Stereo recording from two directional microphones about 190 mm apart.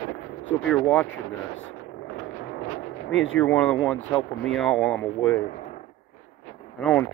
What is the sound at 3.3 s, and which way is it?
Speech, 5° left (ahead or behind).